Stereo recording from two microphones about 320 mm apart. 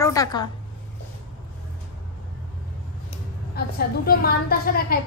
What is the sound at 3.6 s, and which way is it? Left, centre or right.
A woman's voice, left.